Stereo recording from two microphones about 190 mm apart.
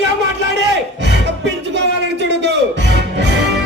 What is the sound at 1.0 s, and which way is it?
Music, 65° right (ahead or behind).